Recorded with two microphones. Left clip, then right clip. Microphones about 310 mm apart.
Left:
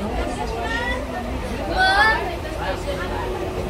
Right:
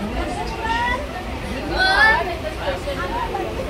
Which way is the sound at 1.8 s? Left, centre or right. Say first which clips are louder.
Right 1 dB; centre.